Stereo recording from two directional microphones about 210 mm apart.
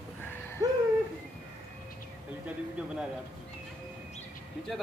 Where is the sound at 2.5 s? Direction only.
5° right (ahead or behind).